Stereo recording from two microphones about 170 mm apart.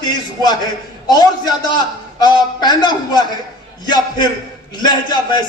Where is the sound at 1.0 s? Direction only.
25° left (ahead or behind).